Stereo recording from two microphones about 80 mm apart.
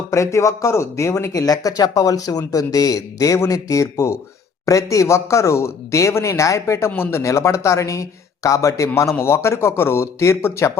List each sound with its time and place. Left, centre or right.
0.1 s speech: left